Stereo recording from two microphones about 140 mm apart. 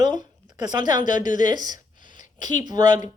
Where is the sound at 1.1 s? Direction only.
65° left (ahead or behind).